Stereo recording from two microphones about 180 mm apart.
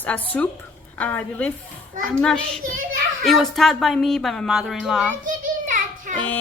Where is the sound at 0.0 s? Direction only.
10° left (ahead or behind).